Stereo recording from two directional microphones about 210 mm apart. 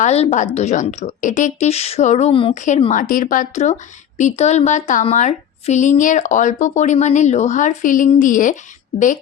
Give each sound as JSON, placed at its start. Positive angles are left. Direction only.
{"t": 0.0, "sound": "a woman's voice", "side_deg": 35}